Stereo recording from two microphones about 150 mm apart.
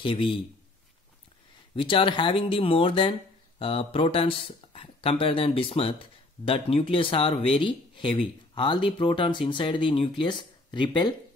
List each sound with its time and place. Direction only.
0.0 s speech: 35° left (ahead or behind)
1.8 s speech: 35° left (ahead or behind)